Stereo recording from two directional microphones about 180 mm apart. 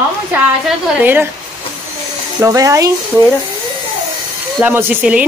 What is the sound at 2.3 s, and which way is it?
Speech, 15° right (ahead or behind).